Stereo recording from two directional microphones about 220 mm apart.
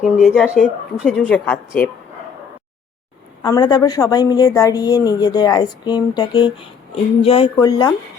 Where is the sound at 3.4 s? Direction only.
15° left (ahead or behind).